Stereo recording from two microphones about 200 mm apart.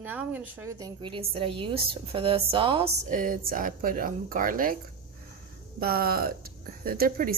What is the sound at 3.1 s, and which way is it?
Speech, 40° right (ahead or behind).